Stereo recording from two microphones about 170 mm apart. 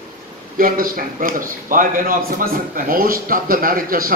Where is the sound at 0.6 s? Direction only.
55° right (ahead or behind).